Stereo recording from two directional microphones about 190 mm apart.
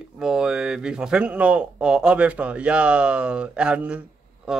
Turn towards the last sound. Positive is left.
turn(degrees=-5)  # may be behind; listen again after turning